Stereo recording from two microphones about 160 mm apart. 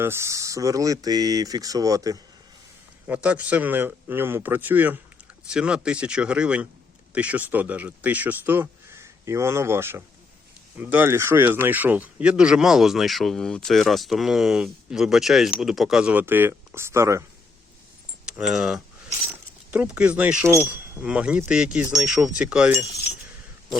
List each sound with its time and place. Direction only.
0.0 s speech: 15° right (ahead or behind)
3.1 s speech: 10° right (ahead or behind)
18.3 s speech: 5° right (ahead or behind)